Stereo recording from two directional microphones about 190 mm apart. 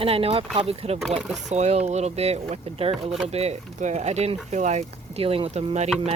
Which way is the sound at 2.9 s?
Centre (ahead or behind).